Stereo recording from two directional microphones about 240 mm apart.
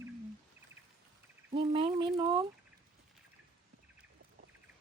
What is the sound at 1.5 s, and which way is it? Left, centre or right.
Speech, right.